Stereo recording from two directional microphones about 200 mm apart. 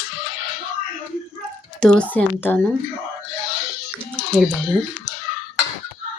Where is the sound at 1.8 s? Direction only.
5° left (ahead or behind).